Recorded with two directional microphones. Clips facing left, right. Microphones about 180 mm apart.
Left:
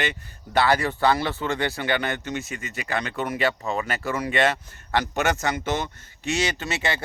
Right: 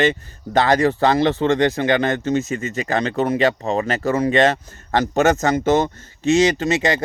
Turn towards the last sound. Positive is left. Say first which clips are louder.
# right 9 dB
turn(degrees=-40)  # may be behind; listen again after turning